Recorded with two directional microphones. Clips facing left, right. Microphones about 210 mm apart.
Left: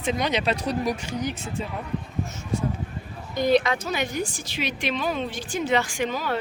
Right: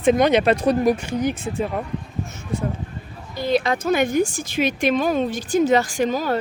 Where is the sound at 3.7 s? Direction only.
50° right (ahead or behind).